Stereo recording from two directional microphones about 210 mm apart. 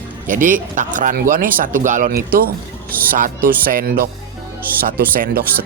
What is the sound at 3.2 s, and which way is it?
Speech, 40° right (ahead or behind).